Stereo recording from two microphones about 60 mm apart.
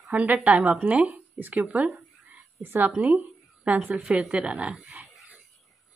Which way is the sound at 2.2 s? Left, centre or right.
Right.